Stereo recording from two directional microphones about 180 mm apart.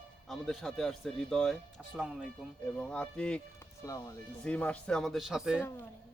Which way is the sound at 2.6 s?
5° left (ahead or behind).